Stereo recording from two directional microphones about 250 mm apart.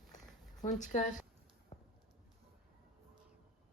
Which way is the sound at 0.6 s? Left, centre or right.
Left.